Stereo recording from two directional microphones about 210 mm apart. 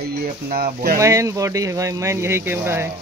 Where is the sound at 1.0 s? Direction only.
15° right (ahead or behind).